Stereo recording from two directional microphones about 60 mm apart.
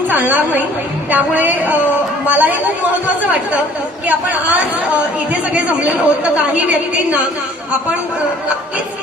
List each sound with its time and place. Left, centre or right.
0.1 s a woman's voice: right
4.0 s a woman's voice: right